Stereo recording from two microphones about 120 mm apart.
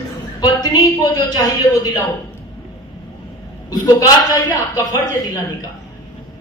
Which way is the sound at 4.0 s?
30° left (ahead or behind).